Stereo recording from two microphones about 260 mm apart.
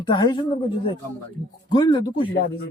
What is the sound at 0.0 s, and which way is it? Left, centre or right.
Speech, centre.